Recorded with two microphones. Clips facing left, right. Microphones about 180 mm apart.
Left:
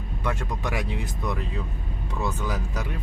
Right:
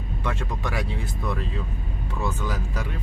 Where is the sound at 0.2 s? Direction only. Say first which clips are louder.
Left 1 dB; 15° left (ahead or behind).